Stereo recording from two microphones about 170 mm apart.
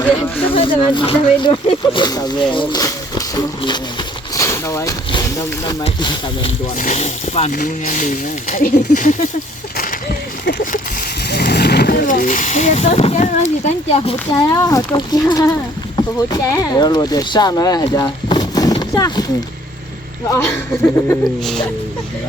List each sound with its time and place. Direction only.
0.5 s speech: 30° left (ahead or behind)
6.7 s speech: 55° left (ahead or behind)
7.0 s speech: 40° left (ahead or behind)
7.5 s speech: 50° left (ahead or behind)
11.3 s speech: 75° left (ahead or behind); by 14.2 s 35° left (ahead or behind)
14.3 s speech: 20° left (ahead or behind)
18.8 s a sound: 20° left (ahead or behind)
20.3 s speech: 15° left (ahead or behind)